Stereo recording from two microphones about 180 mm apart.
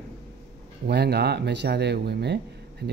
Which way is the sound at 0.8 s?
65° right (ahead or behind).